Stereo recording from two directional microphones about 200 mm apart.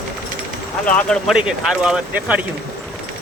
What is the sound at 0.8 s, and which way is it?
Speech, 5° left (ahead or behind).